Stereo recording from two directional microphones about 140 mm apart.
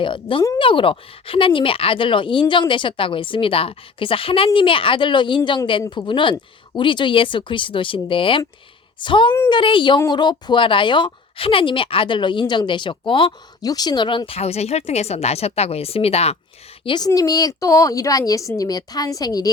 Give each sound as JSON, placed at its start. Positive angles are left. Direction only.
{"t": 0.0, "sound": "speech", "side_deg": 35}
{"t": 16.8, "sound": "a woman's voice", "side_deg": 35}